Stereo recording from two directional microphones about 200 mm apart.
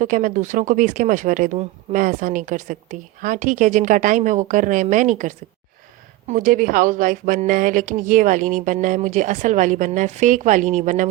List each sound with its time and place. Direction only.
0.0 s speech: 40° right (ahead or behind)